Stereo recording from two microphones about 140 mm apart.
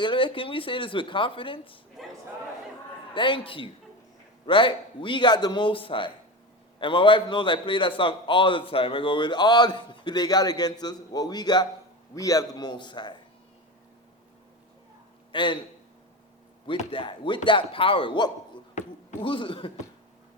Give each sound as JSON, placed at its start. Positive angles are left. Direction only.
{"t": 0.0, "sound": "a man's voice", "side_deg": 35}
{"t": 3.2, "sound": "a man's voice", "side_deg": 40}
{"t": 15.3, "sound": "a man's voice", "side_deg": 35}
{"t": 16.6, "sound": "a man's voice", "side_deg": 35}
{"t": 18.8, "sound": "basketball bounce", "side_deg": 55}
{"t": 19.2, "sound": "a man's voice", "side_deg": 40}